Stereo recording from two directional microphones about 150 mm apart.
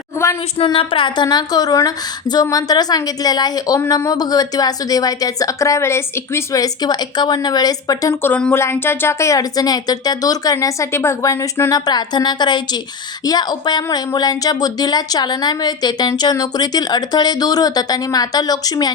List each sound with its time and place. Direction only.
0.6 s speech: 35° left (ahead or behind)